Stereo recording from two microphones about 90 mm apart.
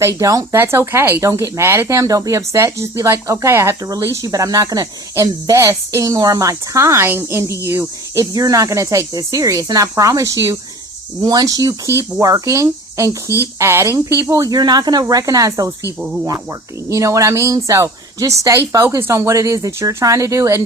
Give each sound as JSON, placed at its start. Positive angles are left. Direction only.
{"t": 0.2, "sound": "speech", "side_deg": -40}
{"t": 0.5, "sound": "speech", "side_deg": -25}
{"t": 11.2, "sound": "speech", "side_deg": -45}